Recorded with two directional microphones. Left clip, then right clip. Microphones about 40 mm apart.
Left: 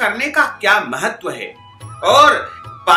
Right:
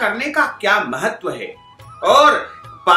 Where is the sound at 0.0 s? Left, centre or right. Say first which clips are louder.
Left 2 dB; left.